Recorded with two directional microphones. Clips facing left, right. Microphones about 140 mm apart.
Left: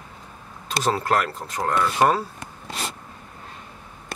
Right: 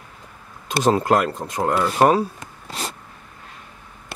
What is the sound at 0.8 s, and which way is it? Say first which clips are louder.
Speech: right 5 dB; 15° right (ahead or behind).